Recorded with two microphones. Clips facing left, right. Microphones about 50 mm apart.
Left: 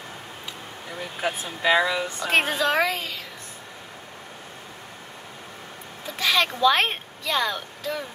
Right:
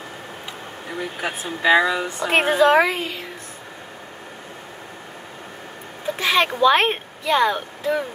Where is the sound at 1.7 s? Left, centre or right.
Right.